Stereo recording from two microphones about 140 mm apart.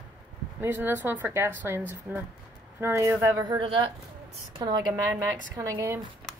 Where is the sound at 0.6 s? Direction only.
15° right (ahead or behind).